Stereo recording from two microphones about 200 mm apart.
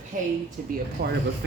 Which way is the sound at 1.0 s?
55° right (ahead or behind).